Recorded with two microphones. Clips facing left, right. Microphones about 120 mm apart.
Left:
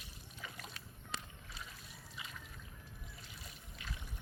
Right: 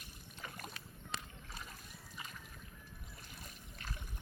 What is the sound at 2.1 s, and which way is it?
Boat, 45° right (ahead or behind).